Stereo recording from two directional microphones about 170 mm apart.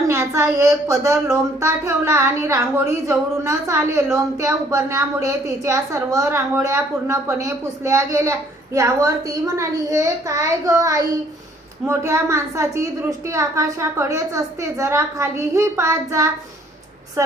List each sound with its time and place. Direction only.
0.1 s a woman's voice: 15° right (ahead or behind)